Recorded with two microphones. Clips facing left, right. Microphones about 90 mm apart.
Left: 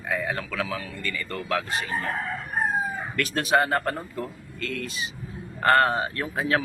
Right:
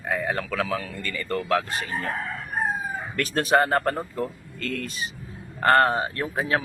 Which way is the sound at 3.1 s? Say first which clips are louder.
Right 2 dB; 40° right (ahead or behind).